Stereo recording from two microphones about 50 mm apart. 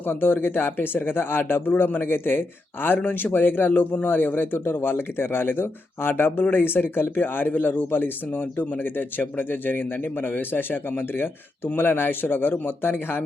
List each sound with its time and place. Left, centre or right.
0.0 s a man's voice: left